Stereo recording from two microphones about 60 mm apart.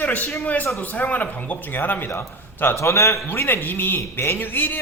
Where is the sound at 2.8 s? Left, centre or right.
Left.